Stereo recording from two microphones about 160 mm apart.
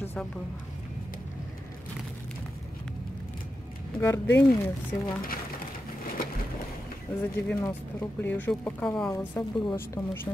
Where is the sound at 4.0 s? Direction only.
15° left (ahead or behind).